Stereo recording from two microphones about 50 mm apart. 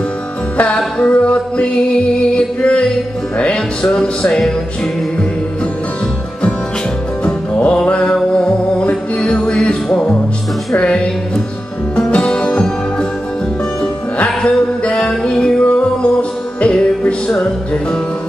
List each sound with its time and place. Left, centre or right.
0.9 s singing: left
2.1 s music: centre
7.2 s music: left
14.1 s music: left